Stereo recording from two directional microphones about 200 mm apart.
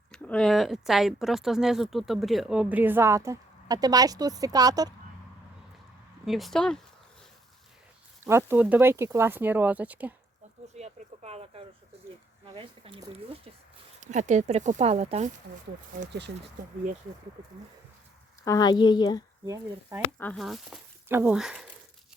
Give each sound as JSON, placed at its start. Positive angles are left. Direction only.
{"t": 0.1, "sound": "speech", "side_deg": 5}
{"t": 6.2, "sound": "speech", "side_deg": 0}
{"t": 8.2, "sound": "speech", "side_deg": -10}
{"t": 10.8, "sound": "speech", "side_deg": -35}
{"t": 18.4, "sound": "speech", "side_deg": 20}
{"t": 19.5, "sound": "speech", "side_deg": -15}
{"t": 20.1, "sound": "speech", "side_deg": 5}